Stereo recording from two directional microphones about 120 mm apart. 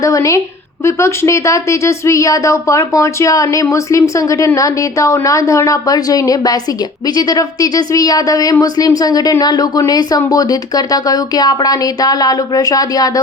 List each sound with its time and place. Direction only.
0.0 s a woman's voice: 25° left (ahead or behind)